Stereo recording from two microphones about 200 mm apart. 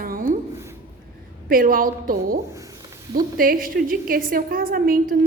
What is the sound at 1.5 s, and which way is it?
A woman's voice, 45° right (ahead or behind).